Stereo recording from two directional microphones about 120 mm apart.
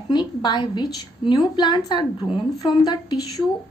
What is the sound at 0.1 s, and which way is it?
A woman's voice, 40° left (ahead or behind).